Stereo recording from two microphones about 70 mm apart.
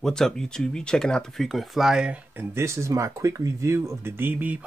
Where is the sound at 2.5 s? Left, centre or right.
Right.